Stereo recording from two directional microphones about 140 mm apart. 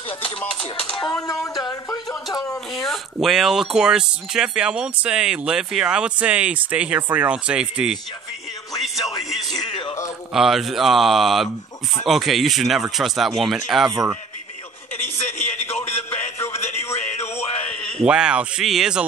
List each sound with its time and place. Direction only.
1.3 s speech: centre (ahead or behind)
1.6 s a sound: 30° left (ahead or behind)
2.7 s speech: centre (ahead or behind)
10.3 s speech: 5° right (ahead or behind)
15.0 s a sound: 50° left (ahead or behind)
16.5 s music: 50° left (ahead or behind)
18.0 s speech: 5° right (ahead or behind)